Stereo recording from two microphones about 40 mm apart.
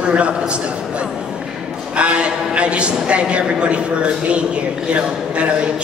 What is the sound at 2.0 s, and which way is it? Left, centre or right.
A man's voice, right.